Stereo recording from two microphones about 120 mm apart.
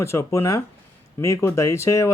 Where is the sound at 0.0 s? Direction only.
25° left (ahead or behind).